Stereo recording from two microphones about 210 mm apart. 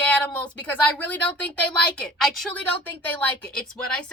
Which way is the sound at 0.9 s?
5° left (ahead or behind).